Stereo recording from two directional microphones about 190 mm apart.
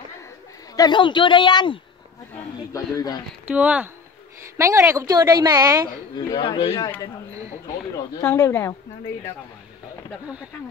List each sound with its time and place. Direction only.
0.7 s speech: 25° left (ahead or behind)
3.4 s a woman's voice: 5° right (ahead or behind)
6.1 s speech: 25° left (ahead or behind)
8.2 s speech: 15° left (ahead or behind)